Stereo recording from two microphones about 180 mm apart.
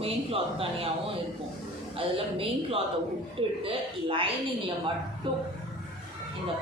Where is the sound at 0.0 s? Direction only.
30° right (ahead or behind).